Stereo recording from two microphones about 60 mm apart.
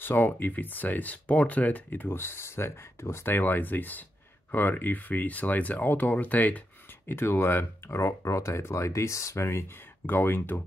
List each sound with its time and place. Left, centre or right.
0.0 s speech: left
7.1 s speech: left
10.0 s speech: left